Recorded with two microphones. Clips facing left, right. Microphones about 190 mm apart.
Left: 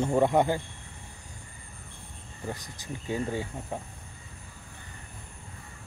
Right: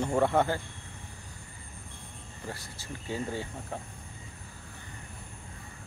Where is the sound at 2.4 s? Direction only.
15° left (ahead or behind).